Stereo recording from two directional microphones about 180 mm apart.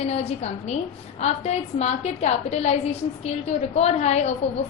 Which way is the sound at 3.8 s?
35° left (ahead or behind).